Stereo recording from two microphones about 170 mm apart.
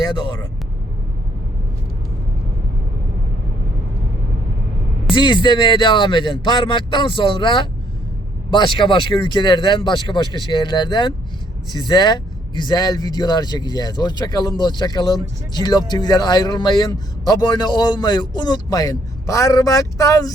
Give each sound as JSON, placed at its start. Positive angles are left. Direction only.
{"t": 0.0, "sound": "speech", "side_deg": 25}
{"t": 5.1, "sound": "speech", "side_deg": 25}